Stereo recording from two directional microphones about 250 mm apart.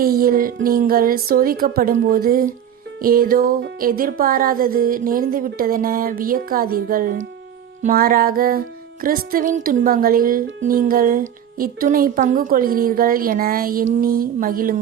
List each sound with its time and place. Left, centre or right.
0.0 s music: right